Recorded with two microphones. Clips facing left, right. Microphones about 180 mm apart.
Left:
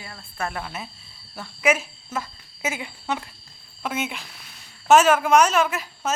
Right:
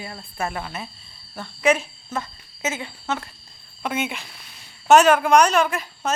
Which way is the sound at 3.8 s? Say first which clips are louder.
Right 2 dB; centre (ahead or behind).